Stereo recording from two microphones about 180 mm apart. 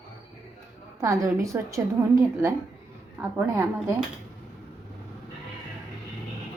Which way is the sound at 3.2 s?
10° right (ahead or behind).